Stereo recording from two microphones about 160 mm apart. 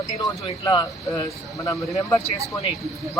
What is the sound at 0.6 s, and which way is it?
Speech, 25° left (ahead or behind).